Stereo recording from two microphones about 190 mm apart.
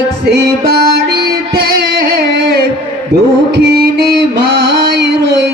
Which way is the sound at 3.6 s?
60° right (ahead or behind).